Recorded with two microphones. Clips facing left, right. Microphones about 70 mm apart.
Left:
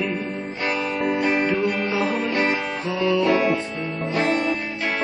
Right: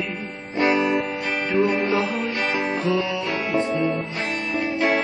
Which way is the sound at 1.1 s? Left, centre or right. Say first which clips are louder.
Left 5 dB; left.